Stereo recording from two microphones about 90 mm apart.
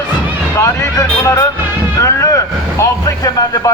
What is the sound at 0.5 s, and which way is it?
Speech, 35° left (ahead or behind).